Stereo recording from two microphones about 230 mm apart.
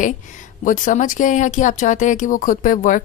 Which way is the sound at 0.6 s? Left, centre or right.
Left.